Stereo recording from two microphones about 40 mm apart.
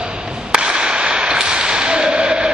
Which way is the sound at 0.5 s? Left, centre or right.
Right.